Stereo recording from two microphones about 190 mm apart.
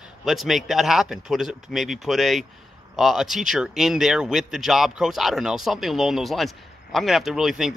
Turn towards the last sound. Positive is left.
turn(degrees=0)  # may be behind; listen again after turning